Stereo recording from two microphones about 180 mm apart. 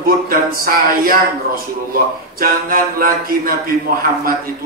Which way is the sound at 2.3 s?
55° right (ahead or behind).